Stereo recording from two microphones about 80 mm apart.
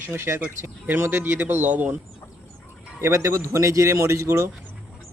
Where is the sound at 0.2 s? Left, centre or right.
Right.